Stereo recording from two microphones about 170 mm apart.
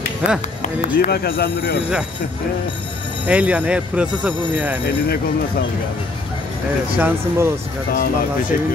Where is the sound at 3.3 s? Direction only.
10° right (ahead or behind).